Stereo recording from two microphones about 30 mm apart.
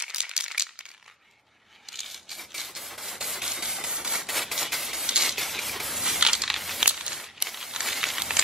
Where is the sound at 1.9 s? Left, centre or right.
Centre.